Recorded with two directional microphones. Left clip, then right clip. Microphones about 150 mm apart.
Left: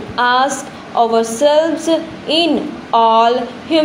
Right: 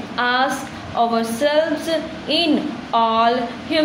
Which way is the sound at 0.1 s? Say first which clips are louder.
Left 5 dB; 20° left (ahead or behind).